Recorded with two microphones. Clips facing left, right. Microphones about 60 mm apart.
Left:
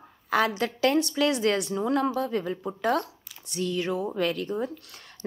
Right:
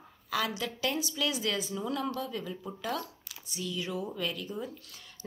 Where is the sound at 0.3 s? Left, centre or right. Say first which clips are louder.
Left 8 dB; left.